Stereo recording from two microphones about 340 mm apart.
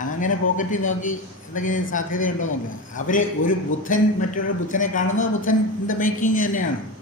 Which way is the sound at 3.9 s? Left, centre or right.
Left.